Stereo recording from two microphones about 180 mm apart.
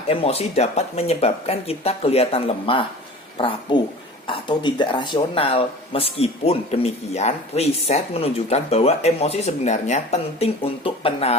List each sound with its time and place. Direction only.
0.1 s speech: 35° left (ahead or behind)